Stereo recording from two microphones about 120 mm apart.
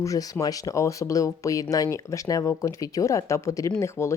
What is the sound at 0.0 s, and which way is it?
Speech, 30° left (ahead or behind).